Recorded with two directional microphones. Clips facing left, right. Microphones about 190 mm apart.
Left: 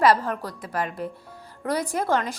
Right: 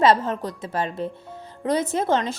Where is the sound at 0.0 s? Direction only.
25° right (ahead or behind).